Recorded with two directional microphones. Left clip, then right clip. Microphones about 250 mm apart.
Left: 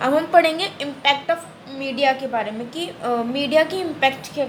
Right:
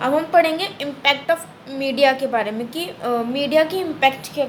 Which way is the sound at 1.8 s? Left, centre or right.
Right.